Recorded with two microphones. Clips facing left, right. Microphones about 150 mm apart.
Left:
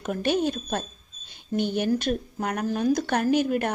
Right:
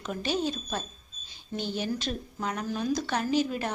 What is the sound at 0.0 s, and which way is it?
Speech, 55° left (ahead or behind).